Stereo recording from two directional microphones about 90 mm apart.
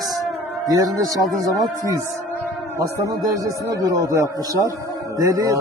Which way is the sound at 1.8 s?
40° right (ahead or behind).